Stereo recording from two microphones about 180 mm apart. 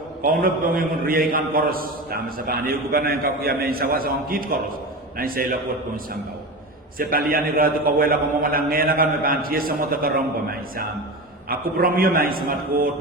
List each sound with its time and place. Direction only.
0.2 s a man's voice: 55° right (ahead or behind)
7.0 s a man's voice: 55° right (ahead or behind)
11.4 s a man's voice: 55° right (ahead or behind)